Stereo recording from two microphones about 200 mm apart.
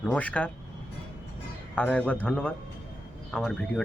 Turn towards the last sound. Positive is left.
turn(degrees=0)  # may be behind; listen again after turning